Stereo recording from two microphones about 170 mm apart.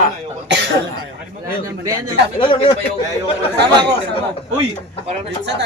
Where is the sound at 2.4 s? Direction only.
30° left (ahead or behind).